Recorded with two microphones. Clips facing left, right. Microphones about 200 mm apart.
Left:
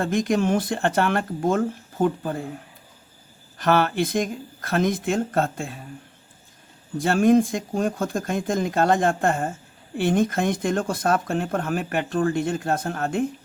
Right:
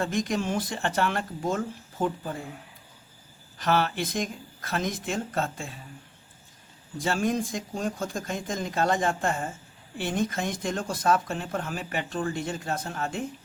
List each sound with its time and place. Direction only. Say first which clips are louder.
0.0 s speech: left 6 dB; 55° left (ahead or behind)
3.6 s speech: left 5 dB; 55° left (ahead or behind)
7.0 s speech: left 9 dB; 60° left (ahead or behind)